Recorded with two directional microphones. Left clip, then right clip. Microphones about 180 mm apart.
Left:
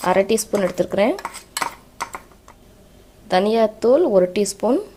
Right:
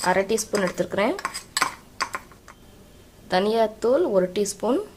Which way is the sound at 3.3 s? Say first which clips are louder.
Left 4 dB; 20° left (ahead or behind).